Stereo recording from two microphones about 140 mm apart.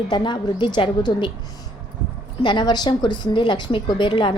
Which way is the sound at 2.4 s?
35° left (ahead or behind).